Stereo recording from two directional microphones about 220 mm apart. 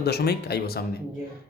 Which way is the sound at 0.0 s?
45° left (ahead or behind).